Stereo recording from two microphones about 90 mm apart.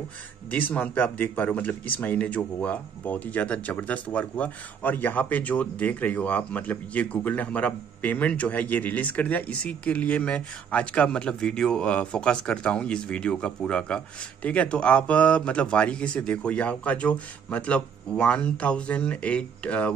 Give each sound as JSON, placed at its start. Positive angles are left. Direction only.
{"t": 0.5, "sound": "speech", "side_deg": 20}